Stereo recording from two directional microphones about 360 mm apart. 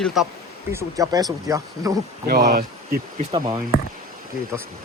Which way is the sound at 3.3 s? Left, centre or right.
Centre.